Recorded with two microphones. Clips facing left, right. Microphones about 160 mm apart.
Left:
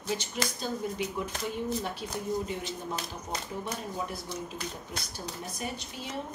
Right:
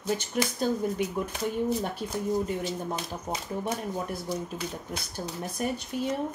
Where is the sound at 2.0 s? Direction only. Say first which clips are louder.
Right 4 dB; 45° right (ahead or behind).